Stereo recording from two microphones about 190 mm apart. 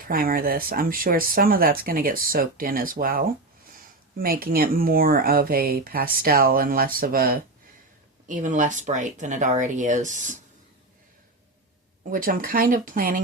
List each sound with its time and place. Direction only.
0.1 s speech: 50° right (ahead or behind)
12.1 s speech: 45° right (ahead or behind)